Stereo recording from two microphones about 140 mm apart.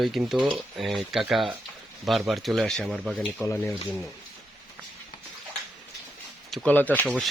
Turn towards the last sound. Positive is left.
turn(degrees=5)  # may be behind; listen again after turning